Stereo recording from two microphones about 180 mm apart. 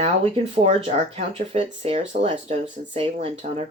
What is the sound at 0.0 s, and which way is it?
Speech, 35° right (ahead or behind).